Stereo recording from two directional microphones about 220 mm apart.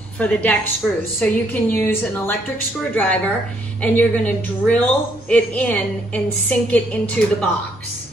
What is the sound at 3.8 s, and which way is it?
A woman's voice, 5° left (ahead or behind).